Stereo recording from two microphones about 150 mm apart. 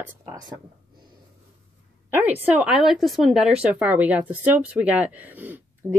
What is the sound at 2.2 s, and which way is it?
Speech, 10° right (ahead or behind).